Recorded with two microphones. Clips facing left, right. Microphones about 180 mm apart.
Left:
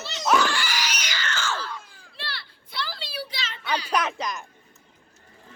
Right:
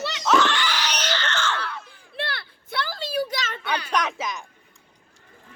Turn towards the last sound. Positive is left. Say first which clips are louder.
# even
turn(degrees=0)  # may be behind; listen again after turning